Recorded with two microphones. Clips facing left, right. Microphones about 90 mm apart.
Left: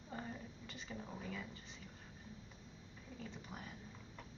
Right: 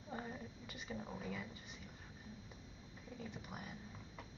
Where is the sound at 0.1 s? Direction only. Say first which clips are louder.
Right 1 dB; 15° right (ahead or behind).